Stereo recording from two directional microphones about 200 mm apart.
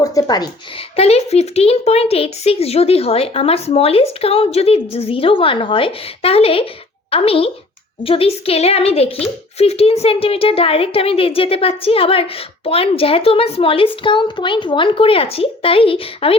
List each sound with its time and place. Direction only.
0.0 s speech: 15° left (ahead or behind)